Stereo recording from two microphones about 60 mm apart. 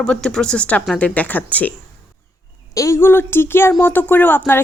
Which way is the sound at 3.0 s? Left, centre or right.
Left.